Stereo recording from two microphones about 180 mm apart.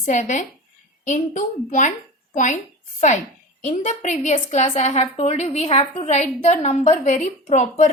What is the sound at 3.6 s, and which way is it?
A woman's voice, 40° left (ahead or behind).